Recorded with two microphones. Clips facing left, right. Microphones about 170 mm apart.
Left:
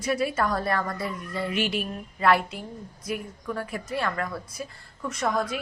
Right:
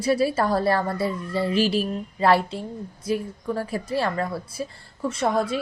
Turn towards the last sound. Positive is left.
turn(degrees=-30)  # may be behind; listen again after turning